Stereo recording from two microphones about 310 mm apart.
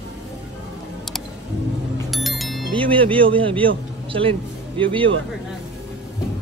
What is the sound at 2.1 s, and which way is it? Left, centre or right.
Music, centre.